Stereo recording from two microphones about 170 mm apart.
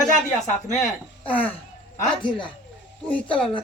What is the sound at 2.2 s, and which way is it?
Speech, 30° left (ahead or behind).